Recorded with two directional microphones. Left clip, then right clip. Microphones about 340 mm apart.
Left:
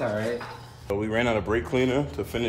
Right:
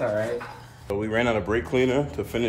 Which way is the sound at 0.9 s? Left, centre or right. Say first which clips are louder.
Right 1 dB; centre.